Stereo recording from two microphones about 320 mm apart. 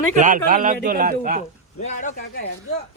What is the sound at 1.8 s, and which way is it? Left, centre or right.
Speech, left.